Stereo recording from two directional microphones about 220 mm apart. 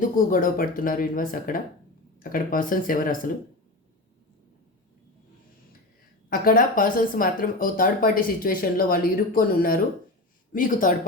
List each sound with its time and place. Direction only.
0.0 s speech: 40° left (ahead or behind)
6.3 s speech: 40° left (ahead or behind)